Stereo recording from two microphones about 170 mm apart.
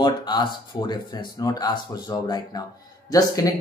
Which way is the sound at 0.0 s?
25° left (ahead or behind).